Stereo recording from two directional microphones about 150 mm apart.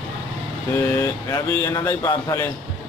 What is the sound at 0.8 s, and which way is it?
Speech, 20° left (ahead or behind).